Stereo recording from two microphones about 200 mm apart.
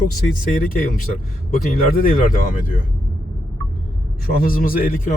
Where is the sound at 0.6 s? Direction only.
45° left (ahead or behind).